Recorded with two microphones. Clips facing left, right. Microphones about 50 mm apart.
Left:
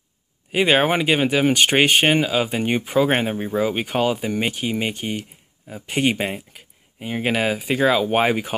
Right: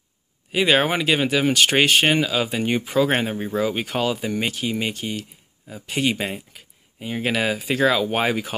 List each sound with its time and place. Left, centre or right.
0.5 s speech: centre